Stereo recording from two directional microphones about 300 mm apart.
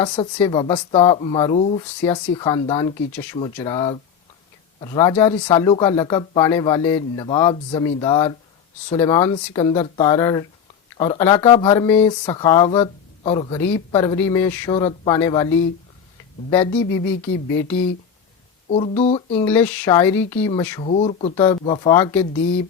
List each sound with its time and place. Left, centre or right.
0.0 s speech: centre
18.7 s speech: left
19.5 s speech: centre